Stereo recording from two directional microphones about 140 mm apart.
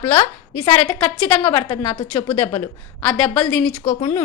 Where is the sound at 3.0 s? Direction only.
10° left (ahead or behind).